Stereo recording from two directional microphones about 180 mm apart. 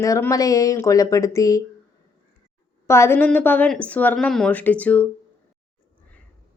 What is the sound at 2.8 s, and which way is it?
A woman's voice, 15° left (ahead or behind).